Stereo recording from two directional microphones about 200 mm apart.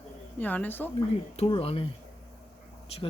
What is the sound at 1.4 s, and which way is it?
Speech, 30° left (ahead or behind).